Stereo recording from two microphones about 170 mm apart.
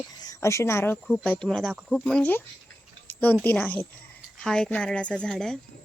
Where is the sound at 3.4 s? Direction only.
10° left (ahead or behind).